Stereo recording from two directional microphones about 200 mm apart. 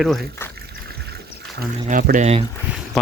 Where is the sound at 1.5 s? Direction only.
45° right (ahead or behind).